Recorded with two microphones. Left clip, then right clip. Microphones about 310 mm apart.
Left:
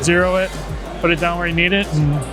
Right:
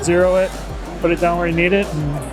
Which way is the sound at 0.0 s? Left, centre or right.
Left.